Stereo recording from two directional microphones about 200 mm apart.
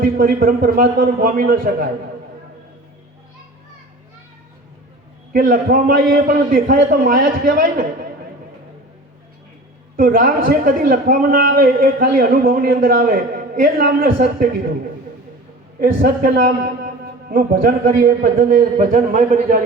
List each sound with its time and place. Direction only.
0.0 s a man's voice: 45° right (ahead or behind)
5.3 s a man's voice: 45° right (ahead or behind)
10.0 s a man's voice: 45° right (ahead or behind)
15.8 s a man's voice: 45° right (ahead or behind)